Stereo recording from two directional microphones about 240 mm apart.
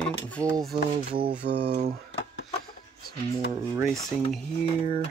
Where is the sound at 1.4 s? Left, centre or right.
Right.